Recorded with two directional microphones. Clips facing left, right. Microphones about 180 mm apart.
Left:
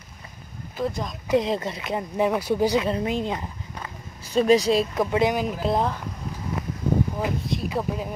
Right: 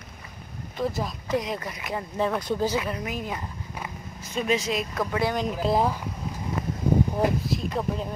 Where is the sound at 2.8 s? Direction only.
25° left (ahead or behind).